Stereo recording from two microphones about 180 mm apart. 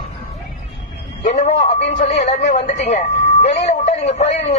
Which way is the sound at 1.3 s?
35° left (ahead or behind).